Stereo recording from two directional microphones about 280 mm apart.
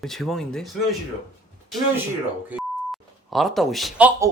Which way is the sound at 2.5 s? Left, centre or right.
Centre.